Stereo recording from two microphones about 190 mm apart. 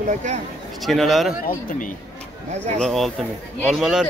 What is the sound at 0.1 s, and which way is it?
Speech, 40° right (ahead or behind).